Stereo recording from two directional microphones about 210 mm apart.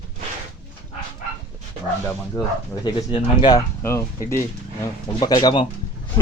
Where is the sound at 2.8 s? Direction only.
25° left (ahead or behind).